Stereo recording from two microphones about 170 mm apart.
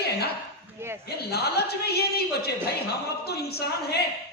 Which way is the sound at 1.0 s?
70° left (ahead or behind).